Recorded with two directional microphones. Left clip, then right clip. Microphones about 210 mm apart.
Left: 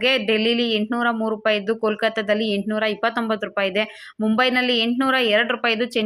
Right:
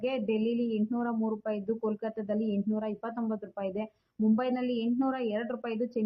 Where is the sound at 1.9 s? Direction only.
20° left (ahead or behind).